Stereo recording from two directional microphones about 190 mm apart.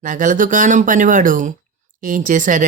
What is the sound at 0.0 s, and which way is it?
A woman's voice, 40° right (ahead or behind).